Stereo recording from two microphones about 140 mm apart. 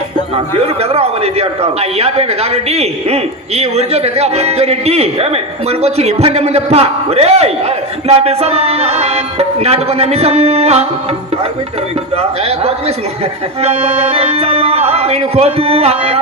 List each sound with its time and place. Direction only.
0.3 s a man's voice: 45° right (ahead or behind)
12.1 s a man's voice: 45° right (ahead or behind)